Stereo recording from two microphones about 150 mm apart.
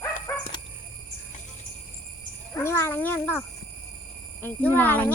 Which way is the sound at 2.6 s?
15° left (ahead or behind).